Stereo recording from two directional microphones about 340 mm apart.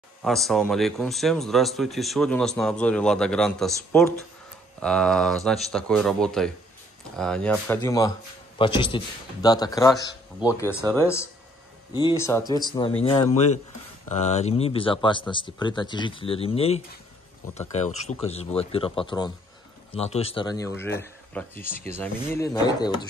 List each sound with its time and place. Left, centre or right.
0.2 s speech: centre